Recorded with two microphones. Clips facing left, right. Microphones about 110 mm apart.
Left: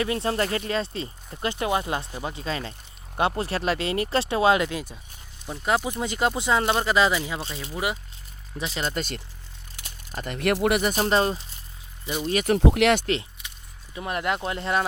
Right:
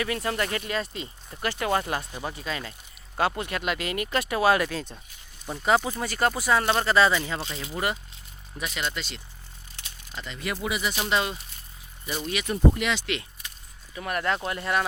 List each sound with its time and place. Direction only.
0.0 s speech: 30° left (ahead or behind)
5.5 s speech: centre (ahead or behind)
5.8 s speech: 20° left (ahead or behind)
8.5 s speech: 30° left (ahead or behind)
12.5 s speech: 80° left
13.9 s speech: 20° left (ahead or behind)